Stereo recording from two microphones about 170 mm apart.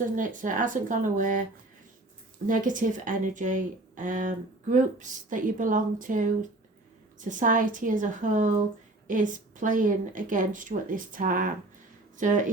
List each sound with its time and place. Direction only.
0.0 s speech: 50° right (ahead or behind)
2.5 s speech: 50° right (ahead or behind)